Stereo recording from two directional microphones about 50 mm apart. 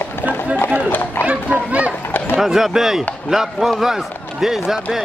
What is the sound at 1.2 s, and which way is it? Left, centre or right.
Children playing, right.